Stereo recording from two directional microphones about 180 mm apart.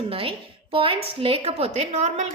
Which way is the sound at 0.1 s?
30° right (ahead or behind).